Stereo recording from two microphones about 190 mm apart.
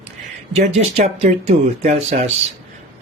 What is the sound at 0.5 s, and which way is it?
Speech, 35° right (ahead or behind).